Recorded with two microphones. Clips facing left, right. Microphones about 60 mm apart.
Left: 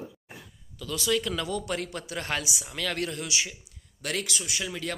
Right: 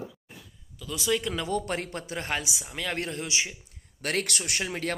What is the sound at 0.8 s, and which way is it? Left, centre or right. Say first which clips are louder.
Speech: left 1 dB; centre.